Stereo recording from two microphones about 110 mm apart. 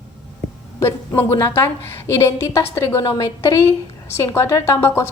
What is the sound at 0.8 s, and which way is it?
A woman's voice, 20° left (ahead or behind).